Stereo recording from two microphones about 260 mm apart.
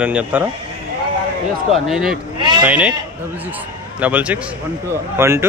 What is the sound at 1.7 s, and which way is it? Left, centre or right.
A man's voice, centre.